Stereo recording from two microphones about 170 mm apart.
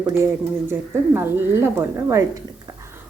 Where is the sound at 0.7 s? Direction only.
15° right (ahead or behind).